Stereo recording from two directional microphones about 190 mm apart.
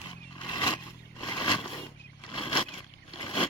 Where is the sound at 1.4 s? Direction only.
25° left (ahead or behind).